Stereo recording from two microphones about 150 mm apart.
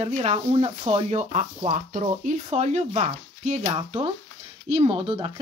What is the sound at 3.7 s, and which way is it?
Speech, 35° right (ahead or behind).